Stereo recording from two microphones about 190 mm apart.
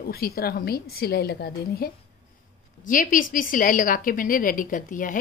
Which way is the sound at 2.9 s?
45° left (ahead or behind).